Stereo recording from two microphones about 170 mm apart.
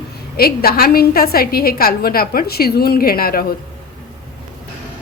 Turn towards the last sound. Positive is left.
turn(degrees=60)  # may be behind; listen again after turning